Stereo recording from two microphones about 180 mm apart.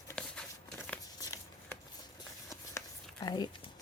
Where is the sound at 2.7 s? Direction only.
25° left (ahead or behind).